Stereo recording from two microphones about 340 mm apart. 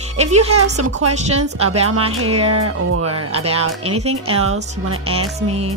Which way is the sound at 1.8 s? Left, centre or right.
Right.